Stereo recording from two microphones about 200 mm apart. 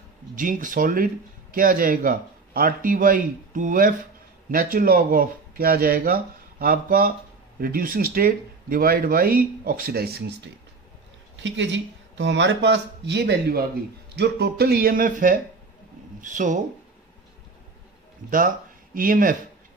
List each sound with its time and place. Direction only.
0.4 s speech: 40° right (ahead or behind)
11.3 s speech: 65° right (ahead or behind); by 16.6 s 40° right (ahead or behind)
18.2 s speech: 40° right (ahead or behind)